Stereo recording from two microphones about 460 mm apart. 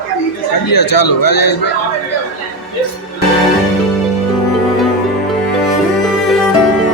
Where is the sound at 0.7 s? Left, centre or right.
Left.